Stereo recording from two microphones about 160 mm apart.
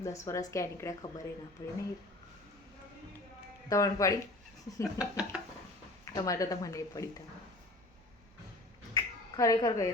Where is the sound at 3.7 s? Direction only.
20° left (ahead or behind).